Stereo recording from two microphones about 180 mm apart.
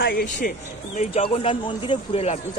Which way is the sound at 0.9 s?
30° left (ahead or behind).